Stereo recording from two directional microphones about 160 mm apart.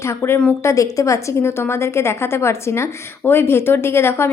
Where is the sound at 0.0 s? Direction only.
15° left (ahead or behind).